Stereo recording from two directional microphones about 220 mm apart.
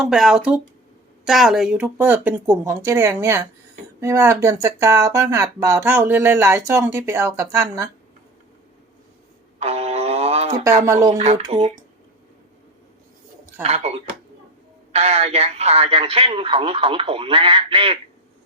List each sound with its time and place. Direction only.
0.0 s speech: centre (ahead or behind)
9.6 s a sound: 30° right (ahead or behind)
10.6 s speech: 15° right (ahead or behind)
11.2 s speech: 30° right (ahead or behind)
11.4 s speech: 20° right (ahead or behind)
13.6 s speech: 30° right (ahead or behind)